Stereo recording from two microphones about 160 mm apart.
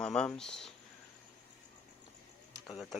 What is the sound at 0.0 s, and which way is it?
Speech, 5° left (ahead or behind).